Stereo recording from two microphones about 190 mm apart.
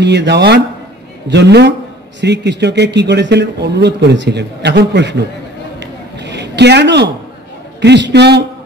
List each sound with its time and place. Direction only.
0.0 s a man's voice: 65° right (ahead or behind)
5.8 s a sound: 65° right (ahead or behind)
7.8 s a man's voice: 65° right (ahead or behind)